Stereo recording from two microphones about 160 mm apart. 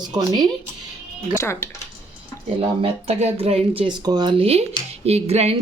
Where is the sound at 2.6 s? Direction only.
40° right (ahead or behind).